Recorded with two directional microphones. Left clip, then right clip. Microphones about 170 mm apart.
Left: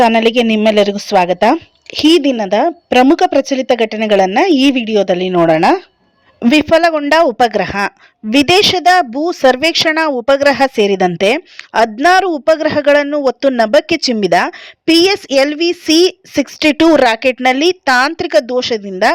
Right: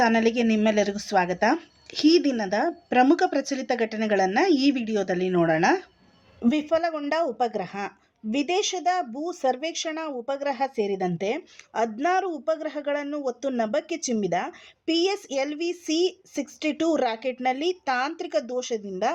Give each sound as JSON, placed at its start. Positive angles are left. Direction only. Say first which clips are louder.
{"t": 0.0, "sound": "a woman's voice", "louder": "left 12 dB", "side_deg": 45}
{"t": 6.4, "sound": "a woman's voice", "louder": "left 14 dB", "side_deg": 55}